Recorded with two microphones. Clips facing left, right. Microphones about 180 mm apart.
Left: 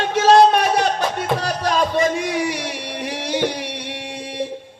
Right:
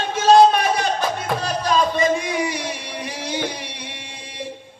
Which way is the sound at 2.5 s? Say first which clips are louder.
Left 2 dB; 75° left (ahead or behind).